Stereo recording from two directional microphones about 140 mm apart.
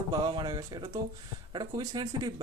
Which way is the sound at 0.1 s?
30° right (ahead or behind).